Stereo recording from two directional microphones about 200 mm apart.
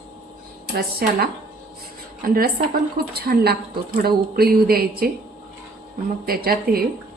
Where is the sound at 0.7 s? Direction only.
50° right (ahead or behind).